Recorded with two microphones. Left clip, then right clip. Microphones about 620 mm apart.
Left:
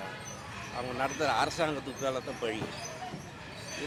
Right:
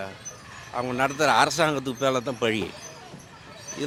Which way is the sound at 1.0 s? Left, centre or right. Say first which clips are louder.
Right 9 dB; right.